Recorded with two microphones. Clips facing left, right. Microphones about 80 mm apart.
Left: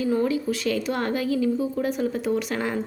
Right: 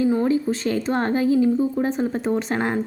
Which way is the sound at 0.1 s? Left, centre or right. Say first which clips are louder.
Right 3 dB; right.